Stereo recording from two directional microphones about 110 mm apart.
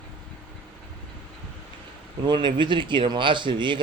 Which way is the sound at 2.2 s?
45° right (ahead or behind).